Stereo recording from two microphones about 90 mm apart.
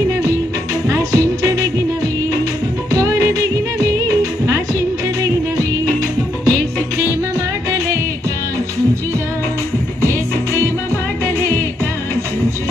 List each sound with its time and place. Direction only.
0.8 s music: 40° right (ahead or behind)
2.9 s music: 40° right (ahead or behind)